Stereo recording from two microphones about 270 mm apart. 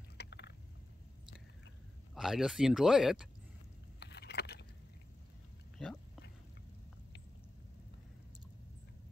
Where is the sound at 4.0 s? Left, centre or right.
Left.